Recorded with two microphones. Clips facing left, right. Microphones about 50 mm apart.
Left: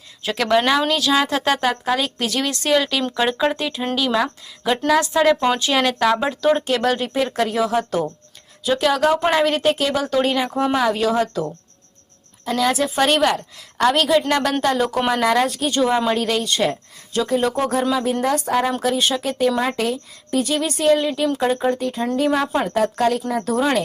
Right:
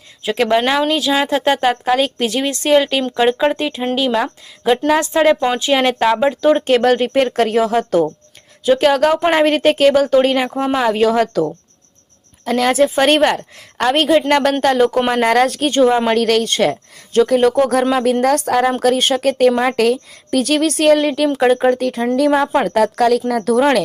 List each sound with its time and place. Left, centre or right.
0.3 s a woman's voice: right
3.0 s a woman's voice: centre
6.7 s a woman's voice: right
10.8 s a woman's voice: right
12.5 s a woman's voice: right
15.4 s a woman's voice: right
15.7 s a woman's voice: right